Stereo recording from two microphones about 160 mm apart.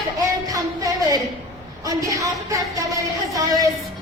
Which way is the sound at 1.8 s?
20° right (ahead or behind).